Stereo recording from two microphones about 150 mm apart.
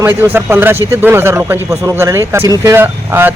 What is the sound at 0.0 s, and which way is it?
A man's voice, 15° right (ahead or behind).